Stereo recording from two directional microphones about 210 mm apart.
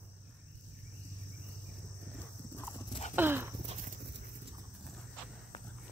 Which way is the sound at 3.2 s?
10° right (ahead or behind).